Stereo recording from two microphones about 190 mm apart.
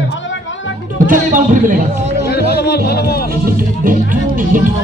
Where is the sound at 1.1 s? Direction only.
45° right (ahead or behind).